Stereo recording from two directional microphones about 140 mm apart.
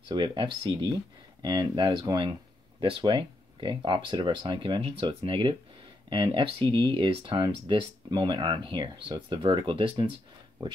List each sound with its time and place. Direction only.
0.1 s speech: 35° right (ahead or behind)